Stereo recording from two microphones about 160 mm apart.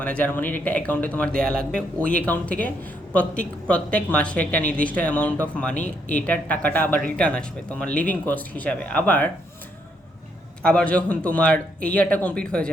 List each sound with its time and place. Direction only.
0.0 s speech: 10° left (ahead or behind)
10.6 s speech: 5° left (ahead or behind)